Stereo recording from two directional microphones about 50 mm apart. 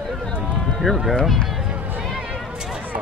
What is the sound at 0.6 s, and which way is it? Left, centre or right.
Sheep, centre.